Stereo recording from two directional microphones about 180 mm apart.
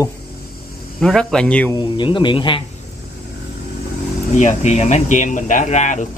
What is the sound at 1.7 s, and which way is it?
Speech, 25° left (ahead or behind).